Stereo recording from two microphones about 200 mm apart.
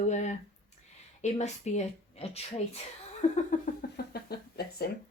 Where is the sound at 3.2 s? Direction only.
45° left (ahead or behind).